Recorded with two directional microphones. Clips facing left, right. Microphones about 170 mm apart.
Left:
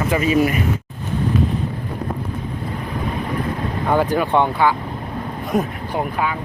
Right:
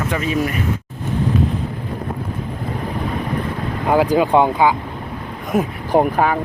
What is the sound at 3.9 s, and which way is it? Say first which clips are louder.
Speech: right 3 dB; 10° right (ahead or behind).